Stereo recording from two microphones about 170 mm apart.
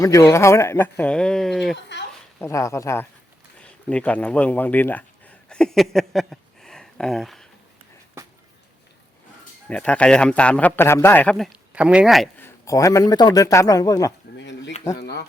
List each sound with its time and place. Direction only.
0.0 s a man's voice: 15° left (ahead or behind); by 1.8 s centre (ahead or behind)
2.4 s a man's voice: 15° left (ahead or behind); by 7.4 s centre (ahead or behind)
9.6 s a man's voice: 5° left (ahead or behind)
12.4 s speech: 20° left (ahead or behind)
14.3 s a sound: 90° left
14.9 s speech: 70° left (ahead or behind)